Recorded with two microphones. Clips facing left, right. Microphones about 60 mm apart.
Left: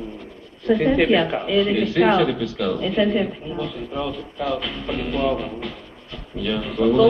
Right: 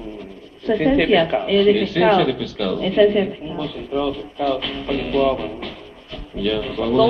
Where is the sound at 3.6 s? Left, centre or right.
Centre.